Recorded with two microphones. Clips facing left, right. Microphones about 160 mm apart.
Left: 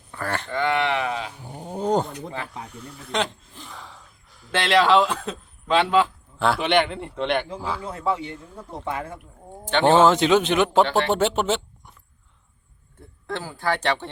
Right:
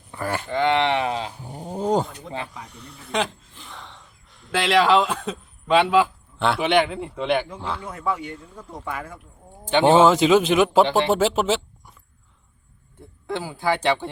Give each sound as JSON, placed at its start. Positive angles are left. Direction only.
{"t": 0.1, "sound": "speech", "side_deg": -15}
{"t": 0.5, "sound": "speech", "side_deg": -25}
{"t": 1.6, "sound": "a man's voice", "side_deg": 0}
{"t": 7.9, "sound": "speech", "side_deg": 25}
{"t": 9.6, "sound": "a man's voice", "side_deg": -10}
{"t": 10.8, "sound": "speech", "side_deg": -15}
{"t": 11.1, "sound": "speech", "side_deg": 0}
{"t": 13.2, "sound": "speech", "side_deg": -10}